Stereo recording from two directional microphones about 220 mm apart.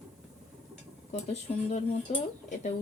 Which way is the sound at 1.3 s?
30° left (ahead or behind).